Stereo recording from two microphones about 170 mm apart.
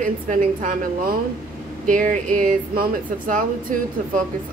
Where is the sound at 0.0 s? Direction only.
50° right (ahead or behind).